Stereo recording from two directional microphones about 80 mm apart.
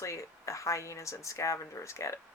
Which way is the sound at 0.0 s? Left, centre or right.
Left.